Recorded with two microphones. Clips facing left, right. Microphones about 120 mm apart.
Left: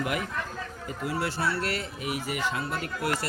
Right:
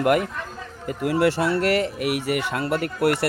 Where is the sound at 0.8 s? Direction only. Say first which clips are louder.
Right 11 dB; 70° right (ahead or behind).